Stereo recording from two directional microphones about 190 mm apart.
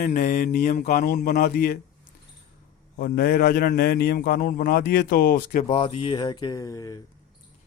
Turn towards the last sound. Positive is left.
turn(degrees=15)  # may be behind; listen again after turning